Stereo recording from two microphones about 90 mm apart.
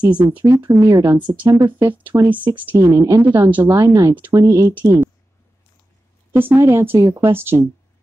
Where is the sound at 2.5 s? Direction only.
40° right (ahead or behind).